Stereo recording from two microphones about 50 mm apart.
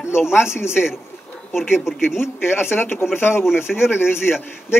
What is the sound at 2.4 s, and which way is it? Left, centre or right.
A man's voice, left.